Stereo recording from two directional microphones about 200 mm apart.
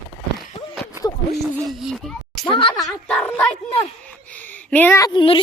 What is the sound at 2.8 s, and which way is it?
Speech, 5° left (ahead or behind).